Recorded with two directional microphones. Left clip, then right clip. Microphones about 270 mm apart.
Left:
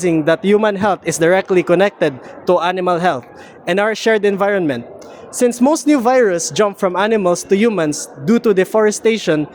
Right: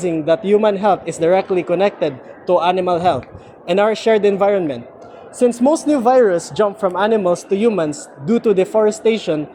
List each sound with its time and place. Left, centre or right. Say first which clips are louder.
0.0 s speech: left 2 dB; left